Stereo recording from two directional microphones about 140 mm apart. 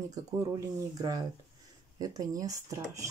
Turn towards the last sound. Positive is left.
turn(degrees=-25)  # may be behind; listen again after turning